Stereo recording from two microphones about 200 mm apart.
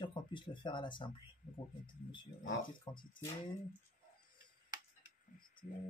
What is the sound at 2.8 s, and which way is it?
Speech, 25° left (ahead or behind).